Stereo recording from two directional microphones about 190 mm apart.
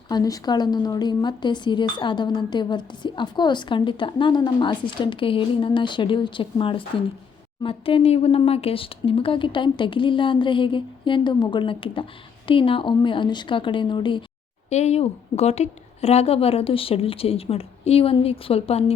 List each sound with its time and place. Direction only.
0.1 s speech: 20° left (ahead or behind)
14.7 s a woman's voice: 35° left (ahead or behind)